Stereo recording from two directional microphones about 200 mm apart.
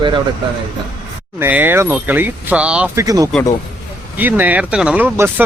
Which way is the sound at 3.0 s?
15° right (ahead or behind).